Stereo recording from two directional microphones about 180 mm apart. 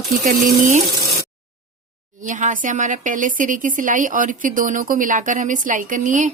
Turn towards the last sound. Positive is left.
turn(degrees=-45)  # may be behind; listen again after turning